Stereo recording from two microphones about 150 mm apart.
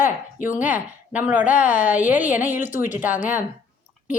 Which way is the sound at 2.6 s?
60° left (ahead or behind).